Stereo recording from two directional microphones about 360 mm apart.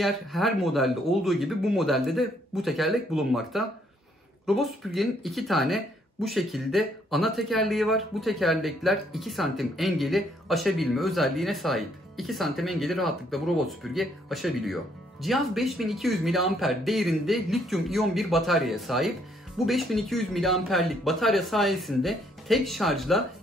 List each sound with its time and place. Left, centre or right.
0.0 s speech: centre